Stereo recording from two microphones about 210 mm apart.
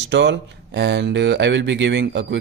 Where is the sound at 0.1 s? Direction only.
60° right (ahead or behind).